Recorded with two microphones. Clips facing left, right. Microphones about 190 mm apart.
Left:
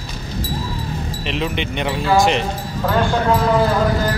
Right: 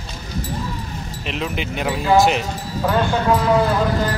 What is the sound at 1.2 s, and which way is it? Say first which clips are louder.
Speech: left 2 dB; centre (ahead or behind).